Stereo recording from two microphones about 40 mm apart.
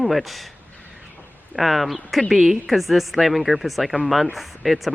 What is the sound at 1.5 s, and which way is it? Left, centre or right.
Speech, centre.